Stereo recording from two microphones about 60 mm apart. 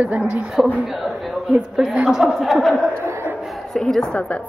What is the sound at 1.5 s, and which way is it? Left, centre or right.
A woman's voice, centre.